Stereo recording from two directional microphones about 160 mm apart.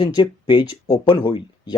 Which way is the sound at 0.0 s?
30° left (ahead or behind).